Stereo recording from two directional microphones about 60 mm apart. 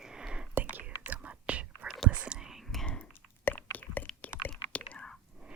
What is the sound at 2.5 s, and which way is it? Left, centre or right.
Whispering, centre.